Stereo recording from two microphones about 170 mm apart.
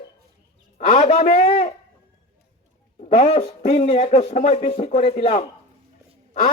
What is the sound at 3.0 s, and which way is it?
A man's voice, 40° left (ahead or behind).